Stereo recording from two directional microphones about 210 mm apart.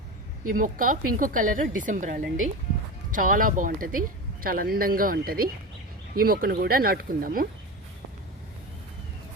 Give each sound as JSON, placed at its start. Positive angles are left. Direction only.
{"t": 0.4, "sound": "a woman's voice", "side_deg": -40}